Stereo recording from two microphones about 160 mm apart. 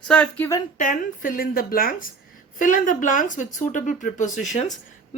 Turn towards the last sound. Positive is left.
turn(degrees=50)  # may be behind; listen again after turning